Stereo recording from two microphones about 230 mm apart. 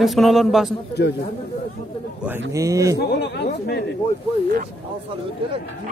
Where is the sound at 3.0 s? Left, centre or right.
Left.